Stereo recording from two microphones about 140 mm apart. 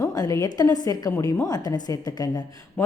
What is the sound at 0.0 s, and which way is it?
A woman's voice, 25° left (ahead or behind).